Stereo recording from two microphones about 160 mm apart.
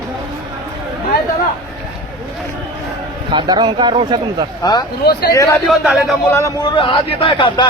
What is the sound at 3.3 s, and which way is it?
A man's voice, 30° right (ahead or behind).